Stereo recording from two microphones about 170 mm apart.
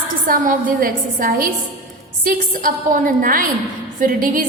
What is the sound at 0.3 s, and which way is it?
A woman's voice, 50° right (ahead or behind).